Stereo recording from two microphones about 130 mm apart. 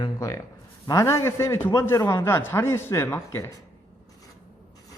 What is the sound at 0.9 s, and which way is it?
A man's voice, 25° left (ahead or behind).